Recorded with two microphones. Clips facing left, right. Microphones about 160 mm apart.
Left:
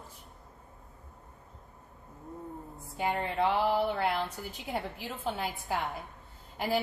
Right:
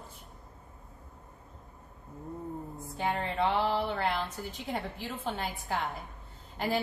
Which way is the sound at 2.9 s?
5° left (ahead or behind).